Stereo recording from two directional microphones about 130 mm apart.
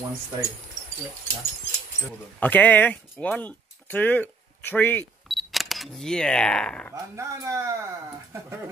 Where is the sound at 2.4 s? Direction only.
15° left (ahead or behind).